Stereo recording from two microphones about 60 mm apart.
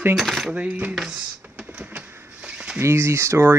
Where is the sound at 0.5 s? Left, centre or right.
Right.